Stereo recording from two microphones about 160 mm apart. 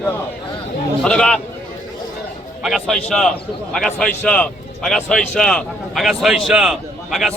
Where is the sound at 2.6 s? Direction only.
Centre (ahead or behind).